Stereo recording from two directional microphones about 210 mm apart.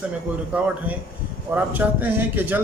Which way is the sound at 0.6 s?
5° right (ahead or behind).